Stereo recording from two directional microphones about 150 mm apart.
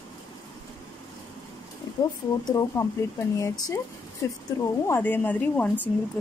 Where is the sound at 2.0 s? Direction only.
25° left (ahead or behind).